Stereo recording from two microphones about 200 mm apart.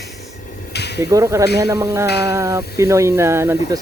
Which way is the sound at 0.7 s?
55° left (ahead or behind).